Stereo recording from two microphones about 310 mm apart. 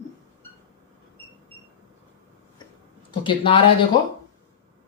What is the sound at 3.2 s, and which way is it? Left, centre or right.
Speech, centre.